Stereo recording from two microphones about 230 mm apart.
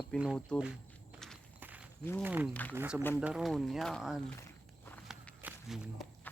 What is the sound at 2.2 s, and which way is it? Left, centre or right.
Speech, centre.